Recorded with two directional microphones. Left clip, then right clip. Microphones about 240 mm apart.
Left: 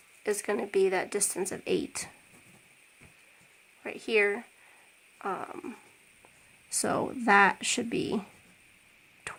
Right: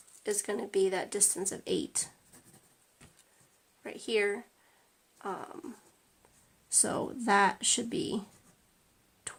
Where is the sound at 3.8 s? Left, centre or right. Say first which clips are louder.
Left 4 dB; centre.